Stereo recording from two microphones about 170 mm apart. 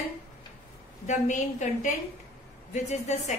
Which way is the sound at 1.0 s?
45° left (ahead or behind).